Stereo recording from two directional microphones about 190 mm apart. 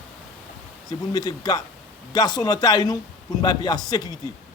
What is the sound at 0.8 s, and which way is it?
Speech, 20° left (ahead or behind).